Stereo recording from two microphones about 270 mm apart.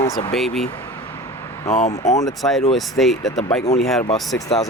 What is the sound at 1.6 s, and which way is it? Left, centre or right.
Speech, left.